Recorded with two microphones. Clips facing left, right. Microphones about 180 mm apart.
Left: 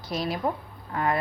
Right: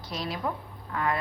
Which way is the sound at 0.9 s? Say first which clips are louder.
Left 3 dB; 40° left (ahead or behind).